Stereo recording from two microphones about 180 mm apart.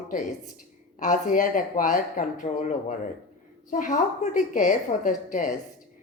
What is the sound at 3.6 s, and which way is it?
A woman's voice, 45° left (ahead or behind).